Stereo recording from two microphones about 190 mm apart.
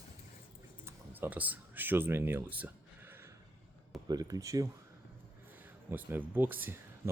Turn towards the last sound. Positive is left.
turn(degrees=-10)  # may be behind; listen again after turning